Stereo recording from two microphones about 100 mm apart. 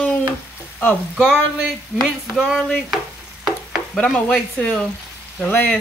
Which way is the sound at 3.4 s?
Centre (ahead or behind).